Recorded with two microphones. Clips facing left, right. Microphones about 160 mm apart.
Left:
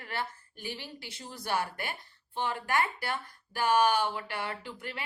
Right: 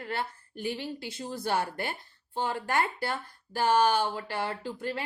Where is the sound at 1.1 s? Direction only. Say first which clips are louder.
Right 2 dB; 55° right (ahead or behind).